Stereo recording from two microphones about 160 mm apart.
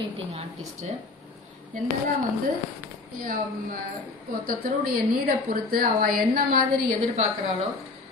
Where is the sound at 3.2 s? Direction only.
60° right (ahead or behind).